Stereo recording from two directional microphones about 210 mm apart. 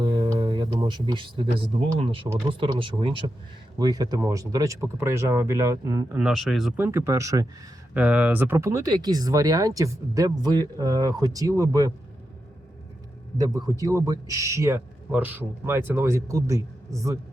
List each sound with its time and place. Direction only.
0.0 s a sound: 20° right (ahead or behind)
2.0 s speech: 25° right (ahead or behind)
6.1 s speech: centre (ahead or behind)
13.4 s speech: 15° right (ahead or behind)